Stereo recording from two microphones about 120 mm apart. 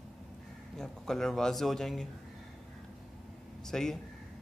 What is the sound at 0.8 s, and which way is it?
Speech, 5° left (ahead or behind).